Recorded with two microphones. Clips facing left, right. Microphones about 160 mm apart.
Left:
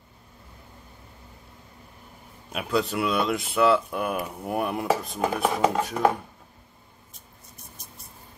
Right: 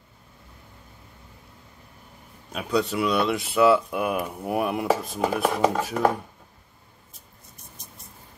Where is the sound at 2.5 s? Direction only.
Centre (ahead or behind).